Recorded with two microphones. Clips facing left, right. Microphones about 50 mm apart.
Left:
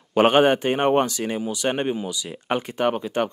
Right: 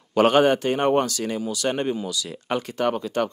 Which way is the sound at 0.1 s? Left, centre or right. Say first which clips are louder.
Left 1 dB; left.